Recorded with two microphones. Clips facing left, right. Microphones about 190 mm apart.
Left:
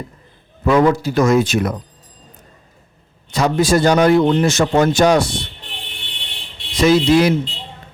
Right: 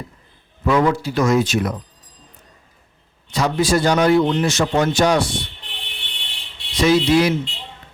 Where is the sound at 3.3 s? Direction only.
45° left (ahead or behind).